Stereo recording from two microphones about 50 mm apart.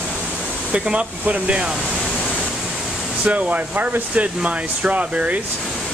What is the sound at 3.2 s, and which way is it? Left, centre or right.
Speech, right.